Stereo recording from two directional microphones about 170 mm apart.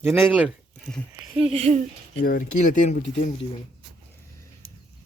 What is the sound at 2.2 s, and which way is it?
Speech, 55° left (ahead or behind).